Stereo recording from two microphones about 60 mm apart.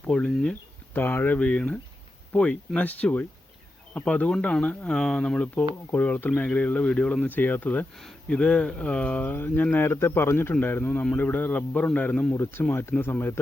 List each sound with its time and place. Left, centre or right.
0.1 s speech: centre
0.9 s speech: left
1.4 s speech: centre
5.9 s speech: left
7.2 s speech: left
12.3 s speech: left